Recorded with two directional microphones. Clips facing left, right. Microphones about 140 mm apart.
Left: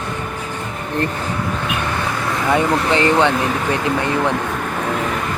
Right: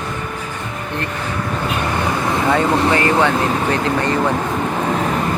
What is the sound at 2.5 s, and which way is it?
Speech, 20° left (ahead or behind).